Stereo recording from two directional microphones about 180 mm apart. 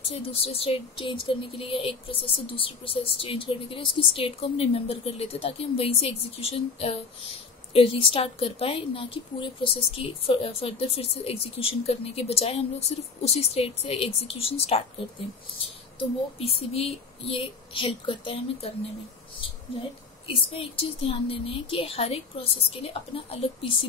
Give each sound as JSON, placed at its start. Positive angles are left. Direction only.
{"t": 0.1, "sound": "a woman's voice", "side_deg": 35}
{"t": 16.0, "sound": "a woman's voice", "side_deg": 30}
{"t": 20.5, "sound": "a woman's voice", "side_deg": 30}